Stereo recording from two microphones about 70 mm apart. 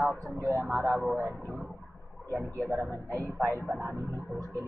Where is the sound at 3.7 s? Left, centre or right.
Right.